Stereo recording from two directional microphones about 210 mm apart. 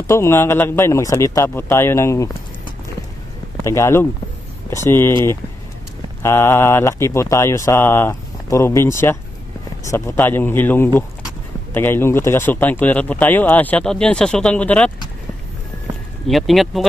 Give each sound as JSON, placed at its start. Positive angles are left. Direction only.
{"t": 0.0, "sound": "speech", "side_deg": 10}
{"t": 6.2, "sound": "speech", "side_deg": 10}
{"t": 16.3, "sound": "speech", "side_deg": 0}